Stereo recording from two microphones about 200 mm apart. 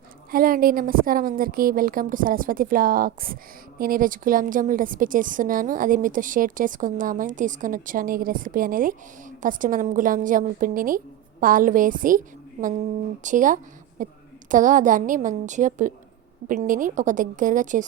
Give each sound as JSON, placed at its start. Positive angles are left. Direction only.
{"t": 0.3, "sound": "a woman's voice", "side_deg": -45}
{"t": 12.6, "sound": "a woman's voice", "side_deg": -30}